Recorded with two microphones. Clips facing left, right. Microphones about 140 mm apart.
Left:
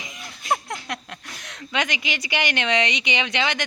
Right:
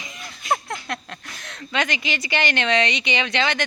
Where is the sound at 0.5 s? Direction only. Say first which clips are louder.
Right 1 dB; 15° left (ahead or behind).